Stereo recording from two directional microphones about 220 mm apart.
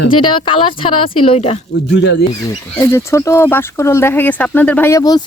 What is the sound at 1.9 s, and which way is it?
Speech, 50° left (ahead or behind).